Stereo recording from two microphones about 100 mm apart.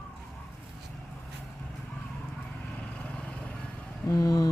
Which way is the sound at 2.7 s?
10° left (ahead or behind).